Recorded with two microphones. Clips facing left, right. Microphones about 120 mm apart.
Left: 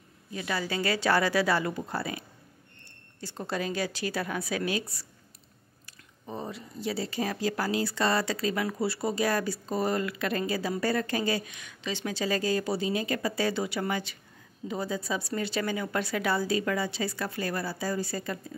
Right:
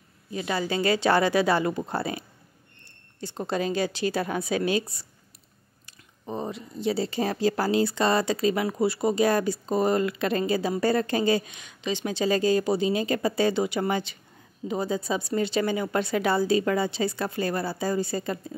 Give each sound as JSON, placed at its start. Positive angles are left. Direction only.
{"t": 0.3, "sound": "speech", "side_deg": -25}
{"t": 3.2, "sound": "speech", "side_deg": -20}